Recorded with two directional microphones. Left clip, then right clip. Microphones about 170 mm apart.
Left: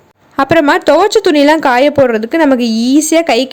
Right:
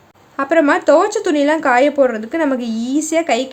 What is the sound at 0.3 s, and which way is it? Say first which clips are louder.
Speech: left 5 dB; 50° left (ahead or behind).